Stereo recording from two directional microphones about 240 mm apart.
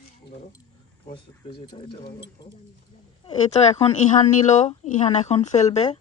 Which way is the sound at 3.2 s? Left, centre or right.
Left.